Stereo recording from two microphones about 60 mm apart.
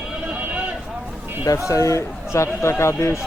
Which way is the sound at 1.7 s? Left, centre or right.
Left.